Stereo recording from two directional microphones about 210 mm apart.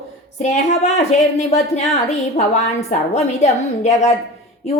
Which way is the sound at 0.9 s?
30° left (ahead or behind).